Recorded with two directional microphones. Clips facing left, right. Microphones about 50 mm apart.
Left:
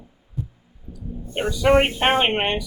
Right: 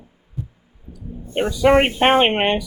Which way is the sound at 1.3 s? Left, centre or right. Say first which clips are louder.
Right 3 dB; right.